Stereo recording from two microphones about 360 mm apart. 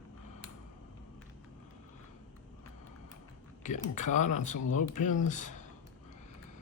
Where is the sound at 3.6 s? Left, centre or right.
Centre.